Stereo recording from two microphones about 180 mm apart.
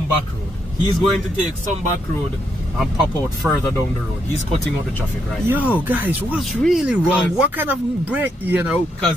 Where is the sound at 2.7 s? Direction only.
Centre (ahead or behind).